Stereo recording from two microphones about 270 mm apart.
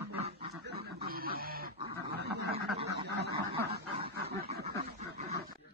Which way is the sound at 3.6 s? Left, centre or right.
Right.